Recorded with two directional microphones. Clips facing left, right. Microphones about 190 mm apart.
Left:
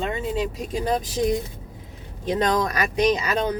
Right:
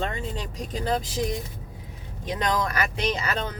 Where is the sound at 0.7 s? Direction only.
15° left (ahead or behind).